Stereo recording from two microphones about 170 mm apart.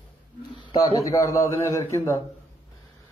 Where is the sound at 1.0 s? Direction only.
20° left (ahead or behind).